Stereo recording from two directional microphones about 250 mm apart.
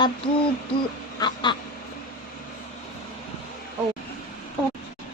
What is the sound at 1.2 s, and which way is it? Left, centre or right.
Quack, centre.